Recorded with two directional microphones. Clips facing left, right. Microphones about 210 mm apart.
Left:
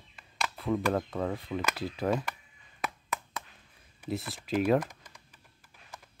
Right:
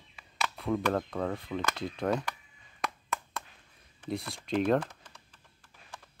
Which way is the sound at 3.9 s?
5° left (ahead or behind).